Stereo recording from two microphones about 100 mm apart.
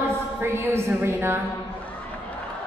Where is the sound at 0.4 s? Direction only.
25° right (ahead or behind).